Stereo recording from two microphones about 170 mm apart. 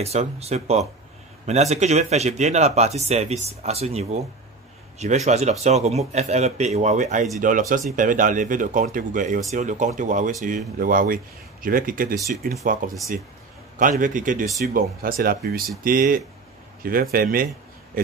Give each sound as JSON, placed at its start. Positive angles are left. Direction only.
{"t": 0.0, "sound": "speech", "side_deg": -40}
{"t": 13.7, "sound": "speech", "side_deg": -50}